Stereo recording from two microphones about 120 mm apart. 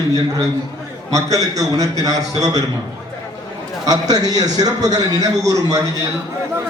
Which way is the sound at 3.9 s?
30° right (ahead or behind).